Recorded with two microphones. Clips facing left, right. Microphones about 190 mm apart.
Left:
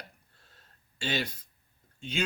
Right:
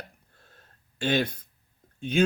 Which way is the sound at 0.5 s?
55° right (ahead or behind).